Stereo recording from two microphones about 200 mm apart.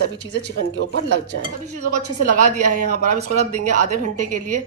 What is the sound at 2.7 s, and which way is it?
A woman's voice, 40° right (ahead or behind).